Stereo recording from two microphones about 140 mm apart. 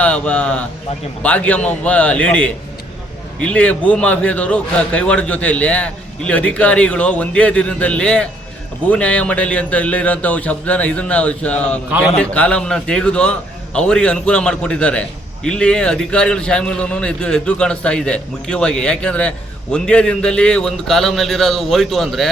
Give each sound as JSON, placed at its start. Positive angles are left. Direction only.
{"t": 0.0, "sound": "a man's voice", "side_deg": 10}